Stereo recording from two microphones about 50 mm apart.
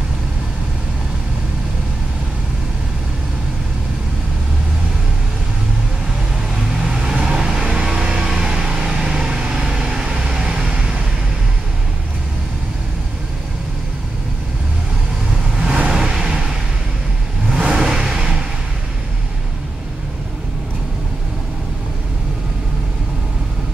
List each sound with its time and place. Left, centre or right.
6.3 s vehicle: centre
15.5 s vehicle: right
17.6 s vehicle: centre